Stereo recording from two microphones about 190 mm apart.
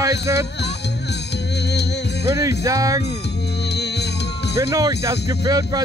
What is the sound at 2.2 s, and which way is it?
Speech, 15° right (ahead or behind).